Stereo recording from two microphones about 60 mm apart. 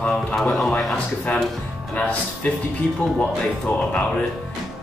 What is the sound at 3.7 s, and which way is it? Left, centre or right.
Speech, centre.